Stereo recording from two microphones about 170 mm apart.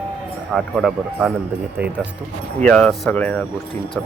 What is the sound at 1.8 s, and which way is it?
Speech, 70° right (ahead or behind).